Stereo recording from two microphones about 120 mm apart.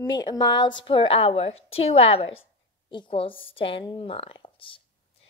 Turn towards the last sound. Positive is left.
turn(degrees=45)  # may be behind; listen again after turning